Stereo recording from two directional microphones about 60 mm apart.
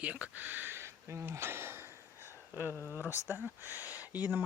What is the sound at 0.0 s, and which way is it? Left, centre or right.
Speech, right.